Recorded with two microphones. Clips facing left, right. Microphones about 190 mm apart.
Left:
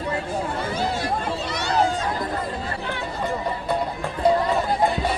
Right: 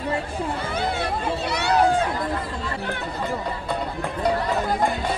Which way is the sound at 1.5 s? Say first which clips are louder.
Right 3 dB; 65° right (ahead or behind).